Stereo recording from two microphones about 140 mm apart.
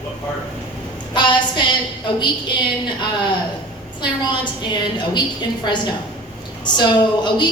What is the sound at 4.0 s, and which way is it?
A woman's voice, 30° left (ahead or behind).